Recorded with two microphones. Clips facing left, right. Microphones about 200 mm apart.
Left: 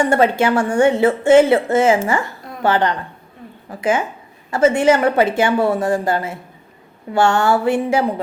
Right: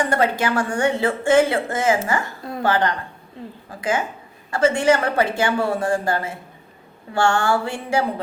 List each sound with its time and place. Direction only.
0.0 s speech: 25° left (ahead or behind)
4.5 s speech: 20° left (ahead or behind)